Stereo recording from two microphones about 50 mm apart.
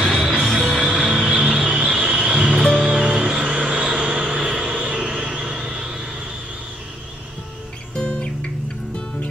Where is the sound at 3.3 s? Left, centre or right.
Right.